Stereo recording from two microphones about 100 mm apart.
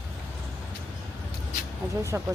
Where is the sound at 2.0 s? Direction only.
30° right (ahead or behind).